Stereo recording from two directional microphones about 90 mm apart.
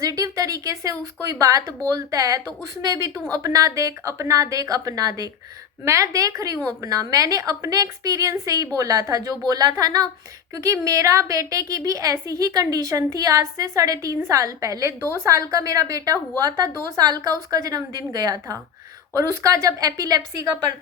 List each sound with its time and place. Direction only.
0.0 s a woman's voice: 40° right (ahead or behind)